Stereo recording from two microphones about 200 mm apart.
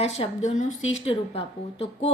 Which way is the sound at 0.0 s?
30° left (ahead or behind).